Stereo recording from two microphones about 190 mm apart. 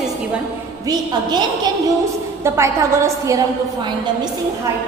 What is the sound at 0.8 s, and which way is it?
A woman's voice, 20° right (ahead or behind).